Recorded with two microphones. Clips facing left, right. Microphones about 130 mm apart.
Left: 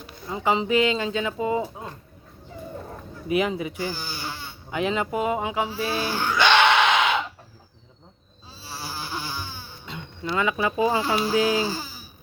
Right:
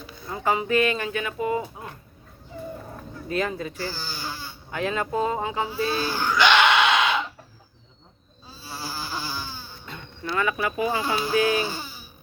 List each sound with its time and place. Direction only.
0.3 s speech: 15° left (ahead or behind)
3.2 s speech: 15° left (ahead or behind)
5.6 s speech: 25° left (ahead or behind)
8.4 s snoring: 30° left (ahead or behind)